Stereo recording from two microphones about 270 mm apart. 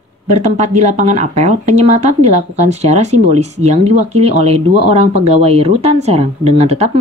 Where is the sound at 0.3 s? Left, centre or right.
Right.